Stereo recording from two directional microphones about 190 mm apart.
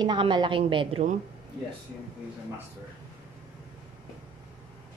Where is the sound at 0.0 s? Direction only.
25° right (ahead or behind).